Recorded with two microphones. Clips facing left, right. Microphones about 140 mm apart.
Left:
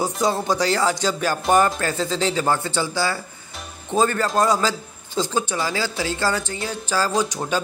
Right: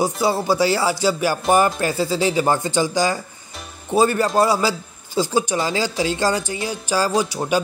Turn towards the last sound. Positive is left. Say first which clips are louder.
# right 2 dB
turn(degrees=-10)  # may be behind; listen again after turning